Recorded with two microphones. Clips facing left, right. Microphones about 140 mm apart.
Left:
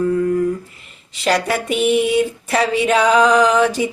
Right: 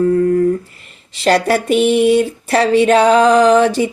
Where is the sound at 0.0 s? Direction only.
40° right (ahead or behind).